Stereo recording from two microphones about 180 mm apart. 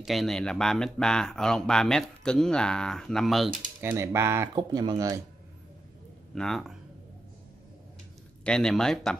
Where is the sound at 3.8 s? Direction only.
15° right (ahead or behind).